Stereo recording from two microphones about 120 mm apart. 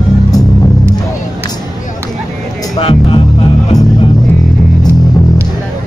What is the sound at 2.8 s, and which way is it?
Music, 50° left (ahead or behind).